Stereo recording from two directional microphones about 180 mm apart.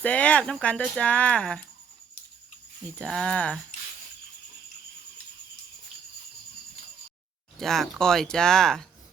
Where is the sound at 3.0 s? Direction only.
Centre (ahead or behind).